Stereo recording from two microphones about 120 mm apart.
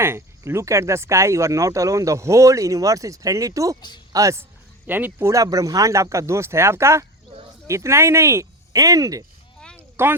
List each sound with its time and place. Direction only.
0.0 s speech: 20° right (ahead or behind)
3.8 s speech: 40° left (ahead or behind)
4.1 s speech: 25° right (ahead or behind)
4.9 s speech: 15° right (ahead or behind)
5.3 s speech: 30° right (ahead or behind)
9.6 s a sound: 5° left (ahead or behind)